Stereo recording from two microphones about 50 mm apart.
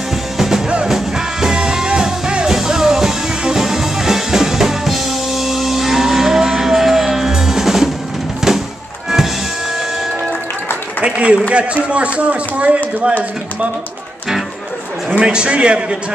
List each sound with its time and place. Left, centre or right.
0.8 s music: centre
11.0 s applause: right
11.5 s speech: right
15.1 s speech: centre